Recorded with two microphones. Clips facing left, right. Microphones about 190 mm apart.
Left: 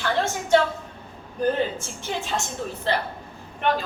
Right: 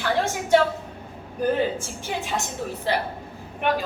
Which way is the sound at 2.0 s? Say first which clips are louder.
Left 1 dB; 10° right (ahead or behind).